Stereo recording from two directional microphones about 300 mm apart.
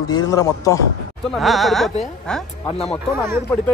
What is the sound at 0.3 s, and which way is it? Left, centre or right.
Speech, centre.